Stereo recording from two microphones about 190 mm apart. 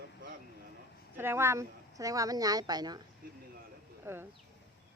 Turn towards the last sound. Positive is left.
turn(degrees=-15)  # may be behind; listen again after turning